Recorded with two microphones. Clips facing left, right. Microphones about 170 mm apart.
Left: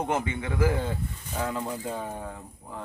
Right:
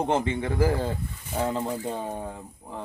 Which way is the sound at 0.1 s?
30° right (ahead or behind).